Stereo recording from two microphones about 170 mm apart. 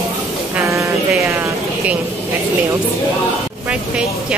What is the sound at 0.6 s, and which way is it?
Speech, 15° right (ahead or behind).